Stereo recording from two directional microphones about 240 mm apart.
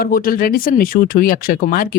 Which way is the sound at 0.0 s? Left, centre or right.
Left.